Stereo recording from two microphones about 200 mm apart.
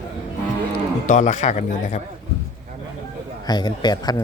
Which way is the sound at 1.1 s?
40° left (ahead or behind).